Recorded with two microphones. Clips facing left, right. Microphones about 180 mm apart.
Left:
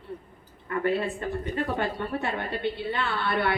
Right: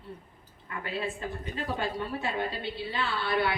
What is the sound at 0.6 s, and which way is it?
A woman's voice, 55° left (ahead or behind).